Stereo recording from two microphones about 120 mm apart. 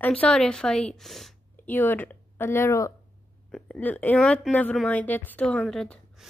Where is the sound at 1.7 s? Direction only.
15° left (ahead or behind).